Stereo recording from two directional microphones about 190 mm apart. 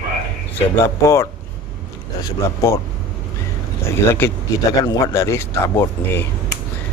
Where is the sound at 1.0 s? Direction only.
15° left (ahead or behind).